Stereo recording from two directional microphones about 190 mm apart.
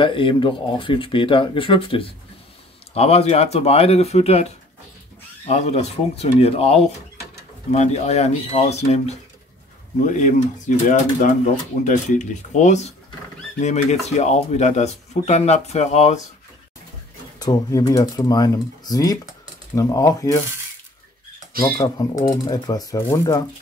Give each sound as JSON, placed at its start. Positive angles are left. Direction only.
{"t": 0.0, "sound": "speech", "side_deg": 25}
{"t": 5.5, "sound": "speech", "side_deg": 35}
{"t": 17.4, "sound": "speech", "side_deg": 20}
{"t": 21.7, "sound": "speech", "side_deg": 20}